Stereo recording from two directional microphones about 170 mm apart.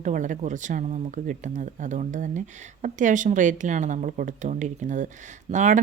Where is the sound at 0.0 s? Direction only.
50° right (ahead or behind).